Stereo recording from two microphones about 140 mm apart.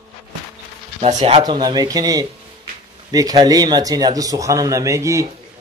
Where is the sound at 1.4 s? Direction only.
30° right (ahead or behind).